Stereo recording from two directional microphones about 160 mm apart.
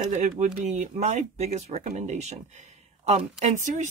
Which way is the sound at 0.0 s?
50° right (ahead or behind).